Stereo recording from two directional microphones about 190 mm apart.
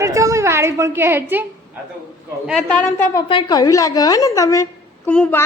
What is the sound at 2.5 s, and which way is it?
Speech, 5° left (ahead or behind).